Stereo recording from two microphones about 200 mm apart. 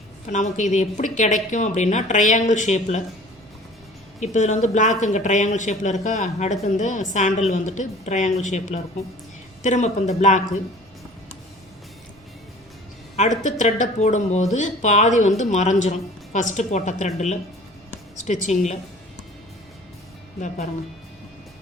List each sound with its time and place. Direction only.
0.3 s speech: 35° left (ahead or behind)
4.2 s speech: 35° left (ahead or behind)
13.1 s speech: 35° left (ahead or behind)